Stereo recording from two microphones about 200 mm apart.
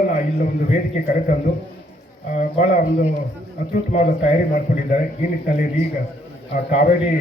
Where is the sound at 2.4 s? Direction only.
40° left (ahead or behind).